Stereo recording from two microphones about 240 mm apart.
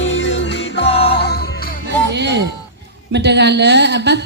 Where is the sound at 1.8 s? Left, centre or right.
Right.